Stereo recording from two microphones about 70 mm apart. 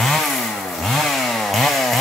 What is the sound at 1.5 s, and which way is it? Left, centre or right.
Chainsaw, centre.